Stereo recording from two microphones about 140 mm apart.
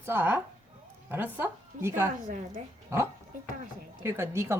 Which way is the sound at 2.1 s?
65° right (ahead or behind).